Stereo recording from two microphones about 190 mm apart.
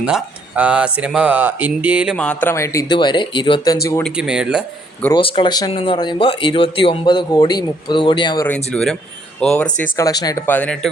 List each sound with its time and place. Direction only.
0.0 s speech: 5° right (ahead or behind)
2.1 s speech: 5° left (ahead or behind); by 3.8 s 25° left (ahead or behind)
4.0 s speech: 5° right (ahead or behind)
5.1 s speech: 25° left (ahead or behind)
8.7 s speech: 5° left (ahead or behind)
9.8 s speech: 20° left (ahead or behind)